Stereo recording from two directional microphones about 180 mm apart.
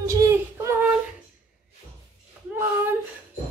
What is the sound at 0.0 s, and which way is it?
Child singing, 15° right (ahead or behind).